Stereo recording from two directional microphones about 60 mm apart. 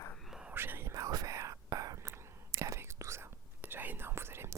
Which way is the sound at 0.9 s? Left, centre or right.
Right.